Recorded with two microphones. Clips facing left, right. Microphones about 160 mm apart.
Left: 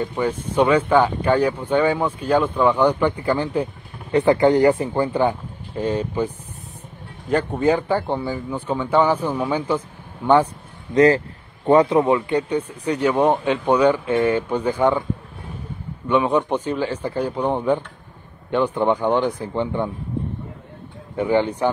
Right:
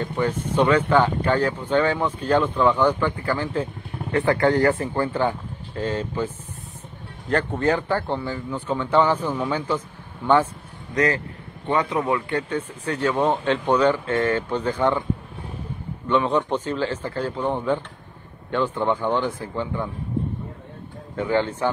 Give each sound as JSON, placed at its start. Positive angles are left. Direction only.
{"t": 0.0, "sound": "speech", "side_deg": 10}
{"t": 11.6, "sound": "speech", "side_deg": 35}
{"t": 16.1, "sound": "speech", "side_deg": 10}
{"t": 21.2, "sound": "speech", "side_deg": 15}